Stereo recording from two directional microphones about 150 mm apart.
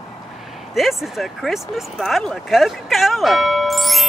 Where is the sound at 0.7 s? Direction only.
Centre (ahead or behind).